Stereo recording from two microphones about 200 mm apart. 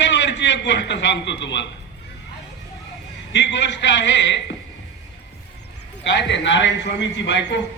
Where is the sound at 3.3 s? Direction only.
60° left (ahead or behind).